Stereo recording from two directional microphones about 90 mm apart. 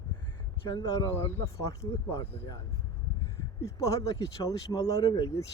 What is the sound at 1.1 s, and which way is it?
Speech, 25° left (ahead or behind).